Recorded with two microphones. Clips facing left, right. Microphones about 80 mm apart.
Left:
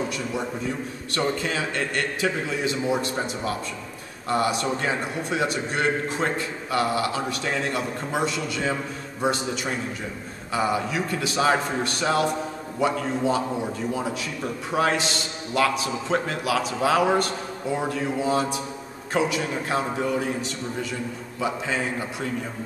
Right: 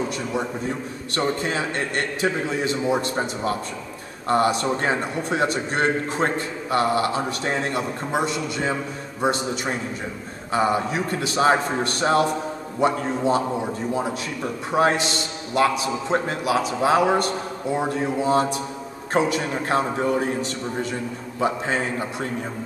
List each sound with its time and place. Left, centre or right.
1.1 s a man's voice: right
8.1 s a man's voice: right
16.1 s a man's voice: right